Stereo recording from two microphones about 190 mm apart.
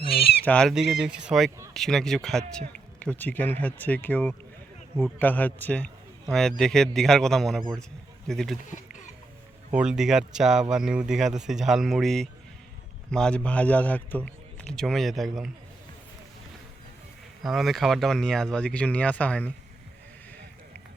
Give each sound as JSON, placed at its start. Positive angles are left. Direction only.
{"t": 0.1, "sound": "a sound", "side_deg": 55}
{"t": 0.4, "sound": "a man's voice", "side_deg": 5}
{"t": 9.7, "sound": "a man's voice", "side_deg": -5}
{"t": 17.4, "sound": "speech", "side_deg": 0}